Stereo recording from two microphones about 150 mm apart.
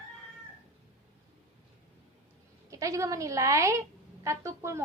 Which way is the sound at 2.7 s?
20° right (ahead or behind).